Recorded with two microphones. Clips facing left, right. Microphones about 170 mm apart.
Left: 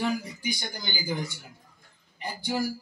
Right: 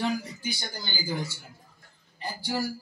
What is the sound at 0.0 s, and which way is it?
Speech, 10° left (ahead or behind).